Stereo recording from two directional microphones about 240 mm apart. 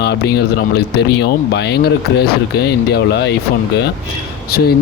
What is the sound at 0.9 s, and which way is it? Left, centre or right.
Speech, left.